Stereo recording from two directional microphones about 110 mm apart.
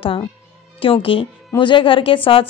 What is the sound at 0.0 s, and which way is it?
A woman's voice, 50° left (ahead or behind).